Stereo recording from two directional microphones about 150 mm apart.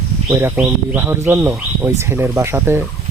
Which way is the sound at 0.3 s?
15° right (ahead or behind).